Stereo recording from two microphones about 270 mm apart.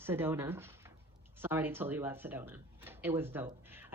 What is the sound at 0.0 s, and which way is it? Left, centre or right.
Speech, centre.